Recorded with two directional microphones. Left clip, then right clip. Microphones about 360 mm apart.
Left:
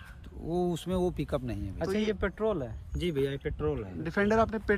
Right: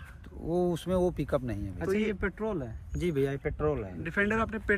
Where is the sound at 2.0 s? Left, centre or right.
Left.